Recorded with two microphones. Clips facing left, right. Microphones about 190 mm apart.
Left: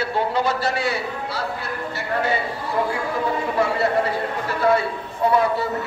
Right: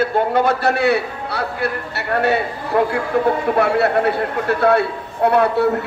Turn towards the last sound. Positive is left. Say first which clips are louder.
# right 5 dB
turn(degrees=-65)  # may be behind; listen again after turning